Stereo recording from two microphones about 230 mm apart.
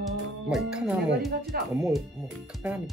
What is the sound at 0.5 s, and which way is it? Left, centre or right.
Speech, centre.